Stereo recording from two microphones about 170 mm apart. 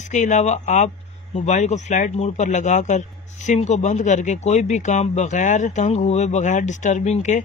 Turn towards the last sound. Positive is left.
turn(degrees=45)  # may be behind; listen again after turning